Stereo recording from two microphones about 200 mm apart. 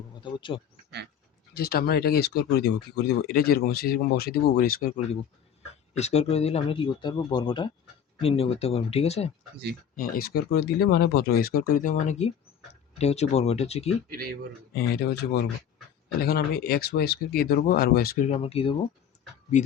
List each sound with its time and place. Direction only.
0.2 s speech: 25° left (ahead or behind)
1.5 s speech: 50° left (ahead or behind)
6.0 s speech: 35° left (ahead or behind)
9.9 s speech: 45° left (ahead or behind); by 13.8 s 30° left (ahead or behind)
14.8 s speech: 50° left (ahead or behind)
18.3 s speech: 30° left (ahead or behind)